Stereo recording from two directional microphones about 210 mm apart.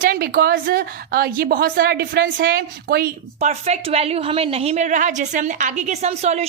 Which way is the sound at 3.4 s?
30° right (ahead or behind).